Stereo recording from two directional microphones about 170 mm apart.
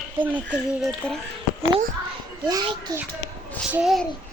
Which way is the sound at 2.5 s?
25° right (ahead or behind).